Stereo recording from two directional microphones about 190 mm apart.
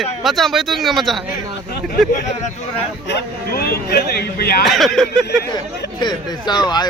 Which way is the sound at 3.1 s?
55° left (ahead or behind).